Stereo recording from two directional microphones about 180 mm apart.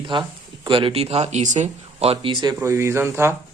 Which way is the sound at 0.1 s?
25° right (ahead or behind).